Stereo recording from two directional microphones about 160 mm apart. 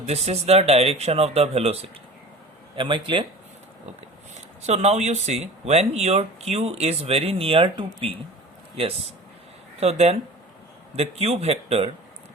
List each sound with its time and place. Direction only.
0.1 s speech: 40° right (ahead or behind)
4.4 s speech: 45° right (ahead or behind)
9.8 s speech: 40° right (ahead or behind)